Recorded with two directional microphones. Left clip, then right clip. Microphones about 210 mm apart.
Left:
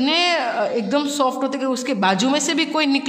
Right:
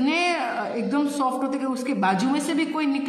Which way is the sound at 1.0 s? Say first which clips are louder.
Left 3 dB; 35° left (ahead or behind).